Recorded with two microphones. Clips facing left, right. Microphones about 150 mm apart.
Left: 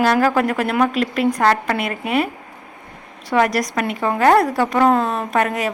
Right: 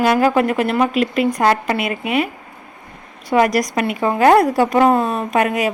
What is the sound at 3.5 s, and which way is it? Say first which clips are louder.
Speech: right 3 dB; 30° left (ahead or behind).